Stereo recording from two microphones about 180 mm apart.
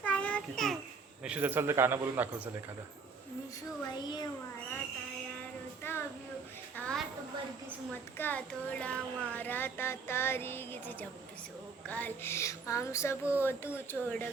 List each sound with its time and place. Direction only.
0.0 s child singing: 5° left (ahead or behind)
1.2 s a man's voice: 10° right (ahead or behind)
3.9 s a child's voice: 25° left (ahead or behind)
5.8 s a sound: 15° left (ahead or behind)
6.7 s a woman's voice: 5° left (ahead or behind)
8.2 s child singing: 10° left (ahead or behind)